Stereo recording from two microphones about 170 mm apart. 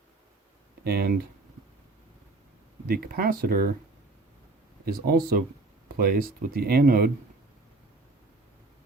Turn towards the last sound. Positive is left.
turn(degrees=-65)  # may be behind; listen again after turning